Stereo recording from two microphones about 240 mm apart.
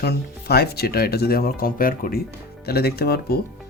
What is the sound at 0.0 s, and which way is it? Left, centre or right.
Speech, left.